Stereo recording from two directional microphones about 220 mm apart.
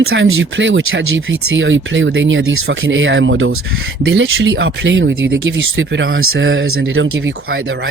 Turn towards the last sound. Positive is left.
turn(degrees=-65)  # may be behind; listen again after turning